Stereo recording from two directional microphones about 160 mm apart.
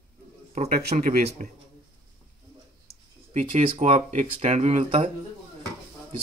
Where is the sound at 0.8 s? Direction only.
60° right (ahead or behind).